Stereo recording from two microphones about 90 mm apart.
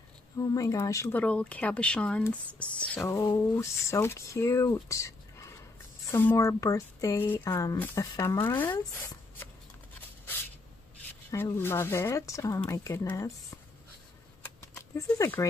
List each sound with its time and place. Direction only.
0.4 s speech: 40° left (ahead or behind)
1.1 s speech: 15° left (ahead or behind)
3.0 s speech: 35° left (ahead or behind)
11.2 s speech: 30° left (ahead or behind)
15.1 s speech: 35° left (ahead or behind)